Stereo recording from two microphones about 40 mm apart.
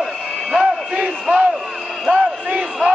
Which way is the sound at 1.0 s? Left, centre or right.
Right.